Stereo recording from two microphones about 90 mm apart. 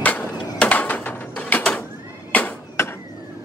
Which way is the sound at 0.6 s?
20° left (ahead or behind).